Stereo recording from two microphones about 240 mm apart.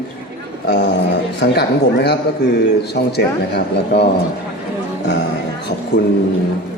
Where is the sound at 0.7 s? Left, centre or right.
Left.